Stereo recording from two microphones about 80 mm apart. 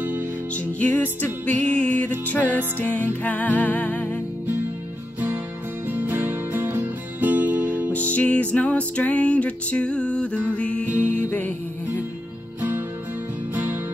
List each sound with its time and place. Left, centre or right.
0.7 s music: centre
5.9 s music: right
7.9 s music: centre